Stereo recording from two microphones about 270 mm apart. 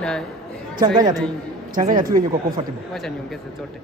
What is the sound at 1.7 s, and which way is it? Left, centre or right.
Speech, right.